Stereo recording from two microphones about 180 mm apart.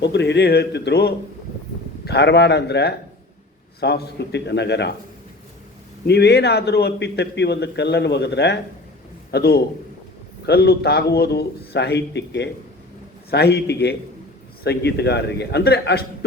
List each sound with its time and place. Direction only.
0.0 s a man's voice: 70° left (ahead or behind)
6.1 s a man's voice: 65° left (ahead or behind)